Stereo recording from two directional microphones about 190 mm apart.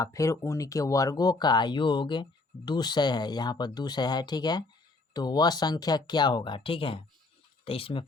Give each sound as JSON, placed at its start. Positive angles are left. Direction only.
{"t": 0.0, "sound": "speech", "side_deg": 15}